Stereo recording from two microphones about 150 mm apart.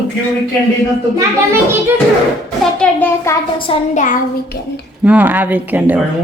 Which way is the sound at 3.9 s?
55° left (ahead or behind).